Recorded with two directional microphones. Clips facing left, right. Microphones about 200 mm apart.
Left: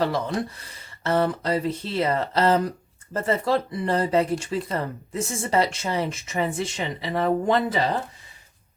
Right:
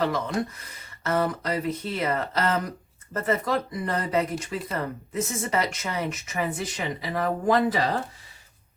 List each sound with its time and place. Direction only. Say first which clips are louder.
0.0 s speech: left 1 dB; 30° left (ahead or behind)